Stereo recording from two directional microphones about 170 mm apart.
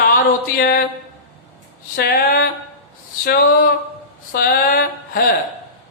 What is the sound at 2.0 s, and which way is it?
A man's voice, 65° left (ahead or behind).